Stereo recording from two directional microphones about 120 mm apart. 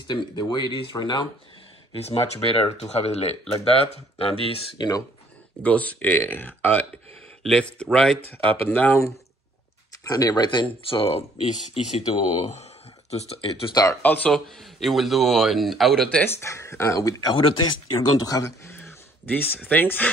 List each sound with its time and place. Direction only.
0.0 s speech: 35° left (ahead or behind)
2.0 s speech: 55° left (ahead or behind)
4.7 s speech: 35° left (ahead or behind)
5.6 s speech: 10° left (ahead or behind)
8.2 s speech: 55° right (ahead or behind)
8.6 s speech: 15° left (ahead or behind)
10.0 s speech: 30° left (ahead or behind); by 13.5 s 55° left (ahead or behind)
14.0 s speech: 15° left (ahead or behind)
14.3 s speech: centre (ahead or behind)
16.3 s speech: 20° left (ahead or behind)
17.4 s speech: 50° left (ahead or behind)
18.1 s speech: 30° left (ahead or behind); by 20.1 s 15° left (ahead or behind)